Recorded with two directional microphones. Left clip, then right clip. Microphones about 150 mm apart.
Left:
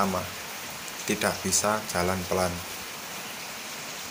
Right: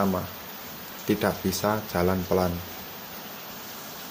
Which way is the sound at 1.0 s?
60° right (ahead or behind).